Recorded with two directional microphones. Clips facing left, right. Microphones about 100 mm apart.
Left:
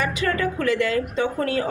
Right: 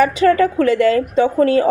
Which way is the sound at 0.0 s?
35° right (ahead or behind).